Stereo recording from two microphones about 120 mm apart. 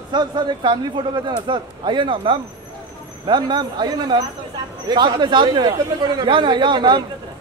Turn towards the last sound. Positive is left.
turn(degrees=-40)  # may be behind; listen again after turning